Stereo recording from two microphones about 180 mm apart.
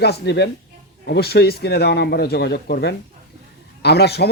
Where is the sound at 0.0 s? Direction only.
65° left (ahead or behind).